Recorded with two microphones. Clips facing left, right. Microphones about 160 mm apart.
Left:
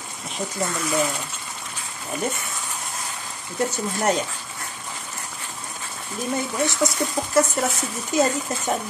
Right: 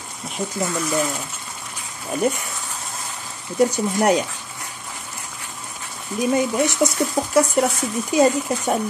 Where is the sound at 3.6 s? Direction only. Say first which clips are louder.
Right 6 dB; 15° right (ahead or behind).